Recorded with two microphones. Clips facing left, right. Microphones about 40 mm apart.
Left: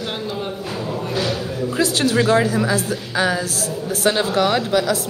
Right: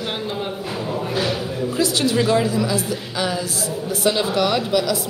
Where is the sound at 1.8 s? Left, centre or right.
Left.